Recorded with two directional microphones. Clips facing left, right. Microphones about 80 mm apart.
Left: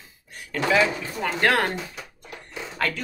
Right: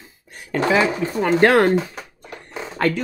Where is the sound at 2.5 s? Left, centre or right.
Right.